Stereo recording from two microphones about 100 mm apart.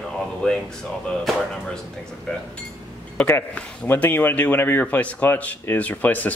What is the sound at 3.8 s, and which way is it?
Speech, 20° left (ahead or behind).